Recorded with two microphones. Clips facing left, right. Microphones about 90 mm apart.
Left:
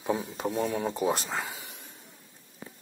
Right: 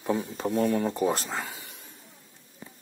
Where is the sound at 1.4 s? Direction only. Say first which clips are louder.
Left 1 dB; 20° left (ahead or behind).